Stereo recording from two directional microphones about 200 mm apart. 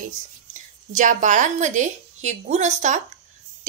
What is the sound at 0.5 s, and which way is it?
A woman's voice, 40° right (ahead or behind).